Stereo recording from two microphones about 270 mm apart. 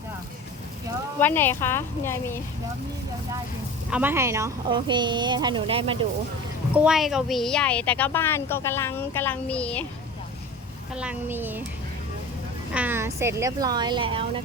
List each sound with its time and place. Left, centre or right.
1.2 s speech: centre
3.9 s speech: centre
6.7 s speech: centre
10.9 s speech: centre
12.7 s speech: centre